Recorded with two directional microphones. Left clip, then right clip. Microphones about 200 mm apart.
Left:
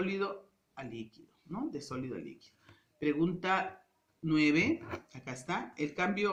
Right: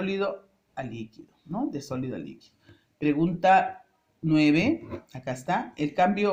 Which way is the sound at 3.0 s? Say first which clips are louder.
Right 9 dB; 45° right (ahead or behind).